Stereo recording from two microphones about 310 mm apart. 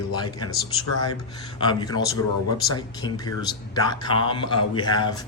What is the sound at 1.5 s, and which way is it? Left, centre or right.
Speech, centre.